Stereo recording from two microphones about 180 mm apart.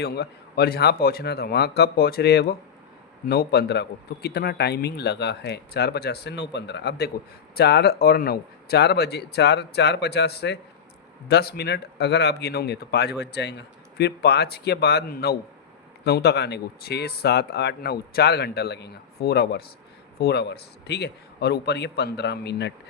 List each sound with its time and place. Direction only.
0.0 s a man's voice: 65° left (ahead or behind)